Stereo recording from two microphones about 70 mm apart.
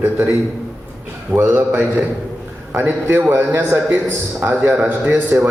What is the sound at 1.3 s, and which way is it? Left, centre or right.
Speech, right.